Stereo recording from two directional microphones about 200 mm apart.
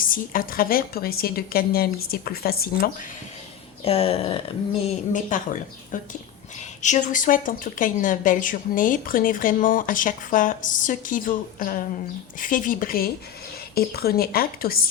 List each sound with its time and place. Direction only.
0.0 s speech: 45° left (ahead or behind)
3.8 s a sound: 30° left (ahead or behind)
5.3 s a woman's voice: 40° left (ahead or behind)